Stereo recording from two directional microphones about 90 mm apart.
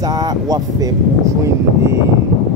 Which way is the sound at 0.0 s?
45° right (ahead or behind).